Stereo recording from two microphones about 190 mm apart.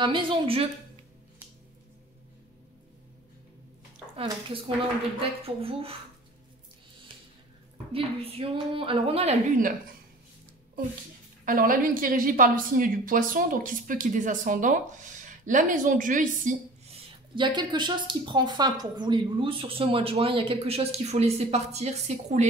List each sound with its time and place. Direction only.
0.0 s a woman's voice: 25° right (ahead or behind)
4.2 s a woman's voice: 30° right (ahead or behind)
7.7 s a woman's voice: 30° right (ahead or behind)
11.4 s a woman's voice: 45° right (ahead or behind)